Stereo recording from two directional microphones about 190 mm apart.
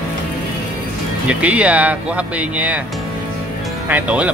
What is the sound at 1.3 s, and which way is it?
Speech, 5° right (ahead or behind).